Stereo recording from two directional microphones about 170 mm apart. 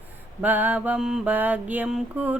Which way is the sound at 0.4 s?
10° right (ahead or behind).